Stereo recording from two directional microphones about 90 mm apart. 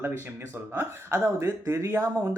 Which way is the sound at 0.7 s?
30° right (ahead or behind).